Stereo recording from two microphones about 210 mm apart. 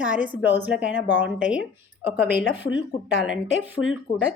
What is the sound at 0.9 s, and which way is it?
Speech, 55° left (ahead or behind).